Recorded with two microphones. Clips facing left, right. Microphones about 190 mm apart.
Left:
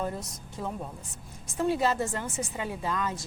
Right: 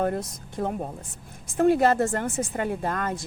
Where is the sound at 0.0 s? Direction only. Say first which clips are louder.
Right 7 dB; 60° right (ahead or behind).